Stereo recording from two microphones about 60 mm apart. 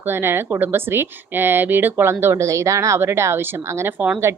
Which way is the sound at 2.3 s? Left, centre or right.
Right.